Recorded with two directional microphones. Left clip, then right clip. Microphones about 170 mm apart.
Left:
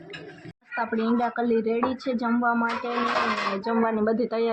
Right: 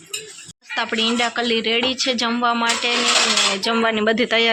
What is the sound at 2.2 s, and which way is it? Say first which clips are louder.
Speech: right 2 dB; 30° right (ahead or behind).